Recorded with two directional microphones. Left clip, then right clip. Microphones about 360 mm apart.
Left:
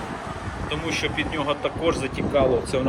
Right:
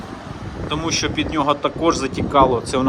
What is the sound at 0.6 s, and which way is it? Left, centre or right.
Speech, centre.